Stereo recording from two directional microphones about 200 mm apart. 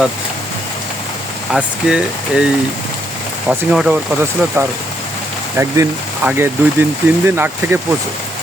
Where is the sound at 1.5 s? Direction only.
5° right (ahead or behind).